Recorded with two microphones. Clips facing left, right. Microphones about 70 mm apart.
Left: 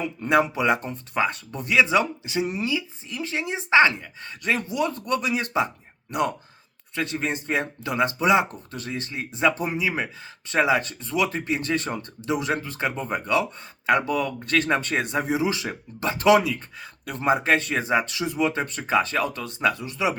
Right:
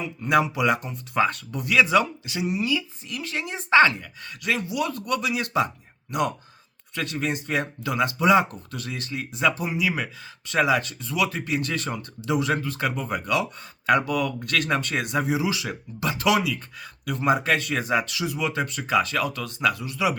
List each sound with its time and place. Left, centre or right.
0.4 s speech: left
2.7 s speech: left